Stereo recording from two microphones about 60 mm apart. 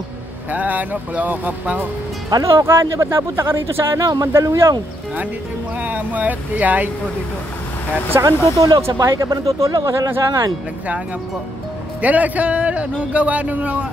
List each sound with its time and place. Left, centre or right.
0.5 s a man's voice: right
2.5 s speech: right
5.8 s a man's voice: right
8.2 s speech: right
12.0 s a man's voice: right